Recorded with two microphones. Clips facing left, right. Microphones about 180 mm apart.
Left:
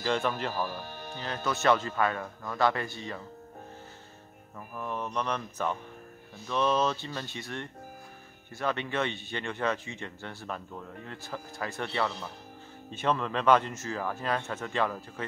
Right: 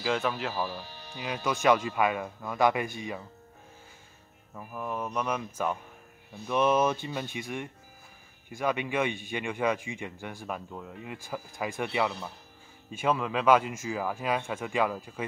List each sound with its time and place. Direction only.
0.0 s speech: 5° right (ahead or behind)
0.7 s speech: 50° left (ahead or behind)
1.1 s speech: 10° right (ahead or behind)
4.6 s speech: 5° right (ahead or behind)